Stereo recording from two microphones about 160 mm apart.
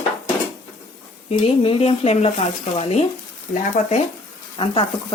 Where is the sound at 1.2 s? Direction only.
35° left (ahead or behind).